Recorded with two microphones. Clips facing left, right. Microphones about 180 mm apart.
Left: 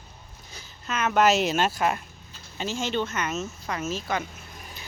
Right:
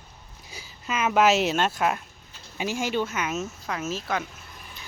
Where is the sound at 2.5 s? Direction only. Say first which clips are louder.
Right 1 dB; 10° right (ahead or behind).